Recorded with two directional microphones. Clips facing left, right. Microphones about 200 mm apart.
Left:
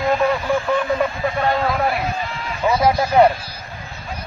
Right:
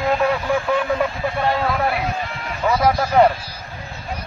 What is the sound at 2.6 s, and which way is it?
Speech, 15° left (ahead or behind).